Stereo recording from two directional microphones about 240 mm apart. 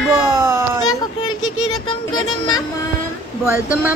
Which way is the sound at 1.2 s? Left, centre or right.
Left.